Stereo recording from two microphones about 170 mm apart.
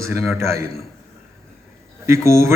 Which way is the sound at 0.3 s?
15° right (ahead or behind).